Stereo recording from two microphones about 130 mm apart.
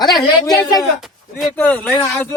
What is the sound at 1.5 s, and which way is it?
Speech, 10° left (ahead or behind).